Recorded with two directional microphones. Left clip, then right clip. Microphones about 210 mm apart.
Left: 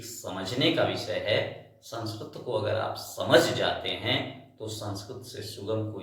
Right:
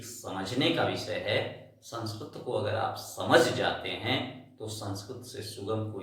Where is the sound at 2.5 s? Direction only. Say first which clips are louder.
Left 2 dB; 5° right (ahead or behind).